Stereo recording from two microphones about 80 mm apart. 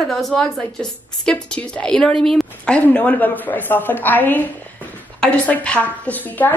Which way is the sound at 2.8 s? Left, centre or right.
Centre.